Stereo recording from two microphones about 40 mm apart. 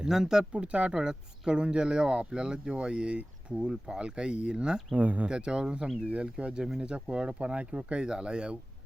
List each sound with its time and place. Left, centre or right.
0.0 s speech: centre
0.5 s speech: right
3.7 s speech: centre
4.9 s speech: right
5.3 s speech: right